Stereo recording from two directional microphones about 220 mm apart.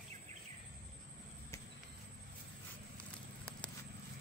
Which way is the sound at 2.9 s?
5° left (ahead or behind).